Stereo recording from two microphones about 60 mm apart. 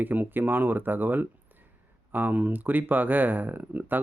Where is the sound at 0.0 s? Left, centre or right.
Right.